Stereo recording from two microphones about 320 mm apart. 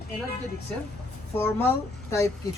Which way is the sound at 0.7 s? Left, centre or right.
Centre.